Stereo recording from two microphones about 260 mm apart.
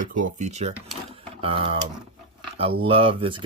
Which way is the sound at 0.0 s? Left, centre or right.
Right.